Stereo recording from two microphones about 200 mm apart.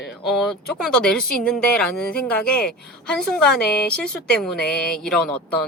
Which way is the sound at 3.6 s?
55° left (ahead or behind).